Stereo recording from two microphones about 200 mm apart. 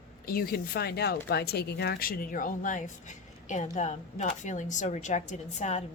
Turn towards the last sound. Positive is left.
turn(degrees=35)  # may be behind; listen again after turning